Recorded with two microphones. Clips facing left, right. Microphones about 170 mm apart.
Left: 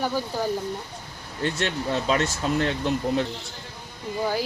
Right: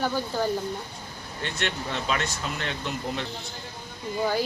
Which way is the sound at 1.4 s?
35° left (ahead or behind).